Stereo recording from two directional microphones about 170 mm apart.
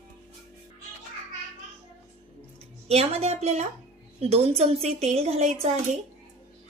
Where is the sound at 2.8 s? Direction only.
40° right (ahead or behind).